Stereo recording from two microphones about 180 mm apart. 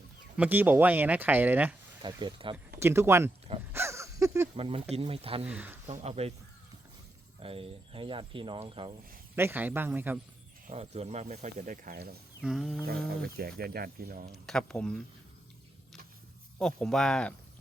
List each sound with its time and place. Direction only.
0.3 s speech: 10° right (ahead or behind)
2.0 s speech: 25° right (ahead or behind)
2.7 s speech: 15° right (ahead or behind)
3.7 s a sound: 15° right (ahead or behind)
4.5 s speech: 30° right (ahead or behind)
5.5 s speech: 10° right (ahead or behind)
5.9 s speech: 35° right (ahead or behind)
7.3 s speech: 30° right (ahead or behind)
9.3 s speech: 10° right (ahead or behind)
10.7 s speech: 35° right (ahead or behind); by 12.1 s 55° right (ahead or behind)
12.4 s speech: centre (ahead or behind)
13.1 s speech: 60° right (ahead or behind)
14.3 s speech: centre (ahead or behind)
16.6 s speech: centre (ahead or behind)